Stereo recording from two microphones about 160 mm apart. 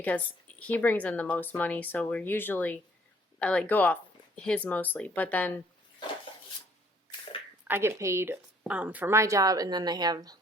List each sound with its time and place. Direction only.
0.6 s speech: 10° left (ahead or behind)
7.7 s speech: 15° right (ahead or behind)